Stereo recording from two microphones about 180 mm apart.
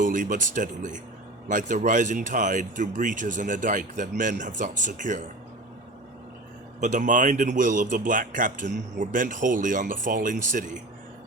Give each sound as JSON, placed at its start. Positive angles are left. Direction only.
{"t": 0.0, "sound": "speech", "side_deg": -45}
{"t": 6.7, "sound": "speech", "side_deg": -45}